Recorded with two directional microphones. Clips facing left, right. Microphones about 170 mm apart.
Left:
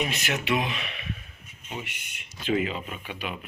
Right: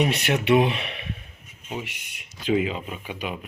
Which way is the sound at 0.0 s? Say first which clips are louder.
Right 6 dB; 30° right (ahead or behind).